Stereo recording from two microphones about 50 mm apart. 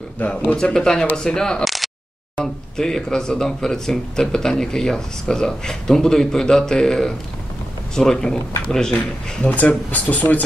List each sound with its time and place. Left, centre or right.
0.6 s speech: centre
2.4 s speech: centre
9.4 s speech: left